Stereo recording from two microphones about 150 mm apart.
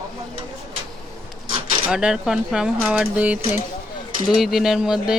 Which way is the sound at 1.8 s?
5° right (ahead or behind).